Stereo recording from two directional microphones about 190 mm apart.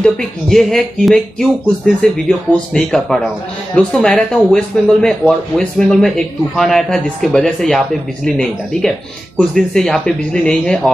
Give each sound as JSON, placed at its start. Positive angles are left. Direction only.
{"t": 0.0, "sound": "speech", "side_deg": 0}